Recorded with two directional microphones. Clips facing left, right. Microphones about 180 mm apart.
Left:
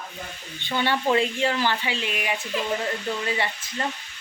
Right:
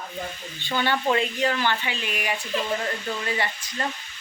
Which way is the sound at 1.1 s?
25° left (ahead or behind).